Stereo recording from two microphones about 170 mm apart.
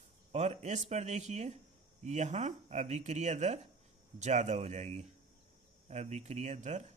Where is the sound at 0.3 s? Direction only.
40° right (ahead or behind).